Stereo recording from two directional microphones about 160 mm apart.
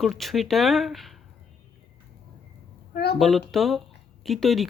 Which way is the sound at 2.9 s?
85° left.